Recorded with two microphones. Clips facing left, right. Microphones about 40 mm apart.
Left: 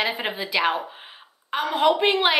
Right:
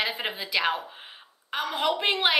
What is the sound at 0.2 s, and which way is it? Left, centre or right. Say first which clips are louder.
A woman's voice: left 4 dB; centre.